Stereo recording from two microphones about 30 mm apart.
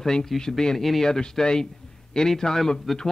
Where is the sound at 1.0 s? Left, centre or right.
Centre.